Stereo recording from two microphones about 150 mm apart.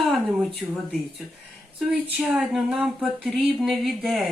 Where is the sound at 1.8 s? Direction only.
5° right (ahead or behind).